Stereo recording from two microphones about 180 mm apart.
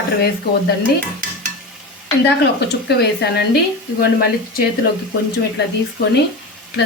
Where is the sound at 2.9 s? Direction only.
65° left (ahead or behind).